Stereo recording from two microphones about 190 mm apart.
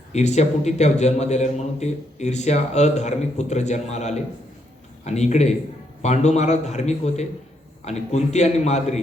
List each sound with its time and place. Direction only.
0.1 s a man's voice: 35° left (ahead or behind)